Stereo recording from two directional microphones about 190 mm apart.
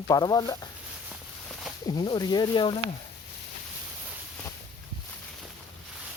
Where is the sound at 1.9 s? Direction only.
25° left (ahead or behind).